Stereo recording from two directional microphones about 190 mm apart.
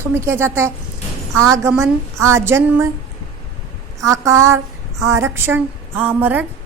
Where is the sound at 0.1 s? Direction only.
15° right (ahead or behind).